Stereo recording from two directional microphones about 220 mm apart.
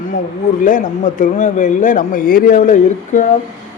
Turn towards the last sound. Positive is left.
turn(degrees=35)  # may be behind; listen again after turning